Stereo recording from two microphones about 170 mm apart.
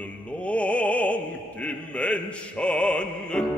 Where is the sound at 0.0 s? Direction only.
5° left (ahead or behind).